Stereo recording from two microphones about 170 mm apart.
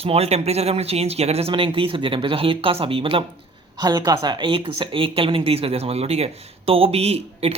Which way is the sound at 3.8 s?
20° right (ahead or behind).